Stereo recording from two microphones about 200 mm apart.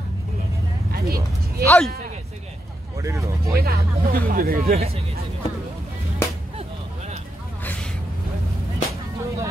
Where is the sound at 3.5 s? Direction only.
50° right (ahead or behind).